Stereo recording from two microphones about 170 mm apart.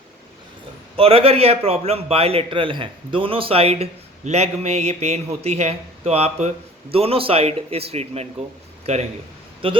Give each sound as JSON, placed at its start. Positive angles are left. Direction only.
{"t": 0.9, "sound": "a man's voice", "side_deg": -35}